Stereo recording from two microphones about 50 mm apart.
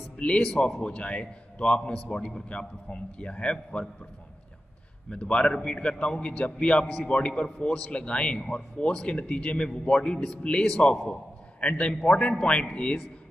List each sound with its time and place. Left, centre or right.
0.2 s a man's voice: left
5.1 s a man's voice: centre